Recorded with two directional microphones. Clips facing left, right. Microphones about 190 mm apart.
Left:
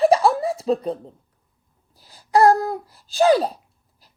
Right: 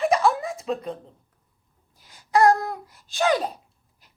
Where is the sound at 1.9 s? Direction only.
35° left (ahead or behind).